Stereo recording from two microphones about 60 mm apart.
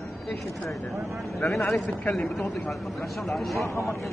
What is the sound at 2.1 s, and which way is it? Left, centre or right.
Speech, centre.